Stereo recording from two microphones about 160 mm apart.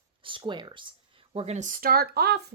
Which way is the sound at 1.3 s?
40° right (ahead or behind).